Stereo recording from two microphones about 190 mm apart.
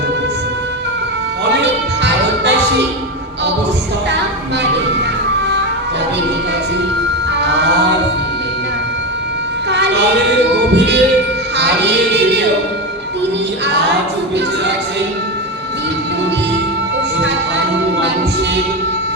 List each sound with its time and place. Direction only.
1.5 s music: 65° right (ahead or behind)
7.3 s music: 65° right (ahead or behind)
9.6 s music: 65° right (ahead or behind)